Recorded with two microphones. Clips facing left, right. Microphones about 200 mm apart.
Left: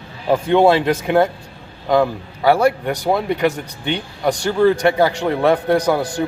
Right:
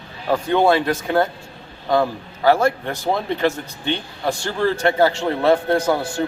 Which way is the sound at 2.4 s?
15° left (ahead or behind).